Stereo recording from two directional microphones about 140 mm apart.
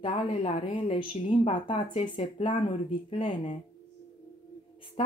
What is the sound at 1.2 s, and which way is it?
Speech, 60° left (ahead or behind).